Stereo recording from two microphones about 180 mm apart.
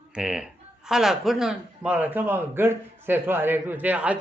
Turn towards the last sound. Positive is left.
turn(degrees=-10)  # may be behind; listen again after turning